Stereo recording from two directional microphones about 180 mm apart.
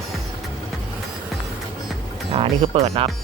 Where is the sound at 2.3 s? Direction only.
35° right (ahead or behind).